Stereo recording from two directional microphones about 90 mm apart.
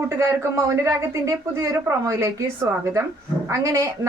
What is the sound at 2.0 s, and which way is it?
Speech, 35° right (ahead or behind).